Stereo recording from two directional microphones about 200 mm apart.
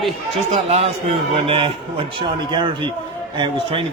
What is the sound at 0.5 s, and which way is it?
A man's voice, 35° right (ahead or behind).